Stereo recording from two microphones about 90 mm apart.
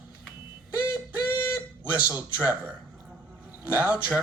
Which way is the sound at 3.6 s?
15° right (ahead or behind).